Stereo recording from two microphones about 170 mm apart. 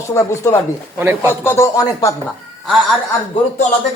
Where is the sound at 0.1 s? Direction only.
20° left (ahead or behind).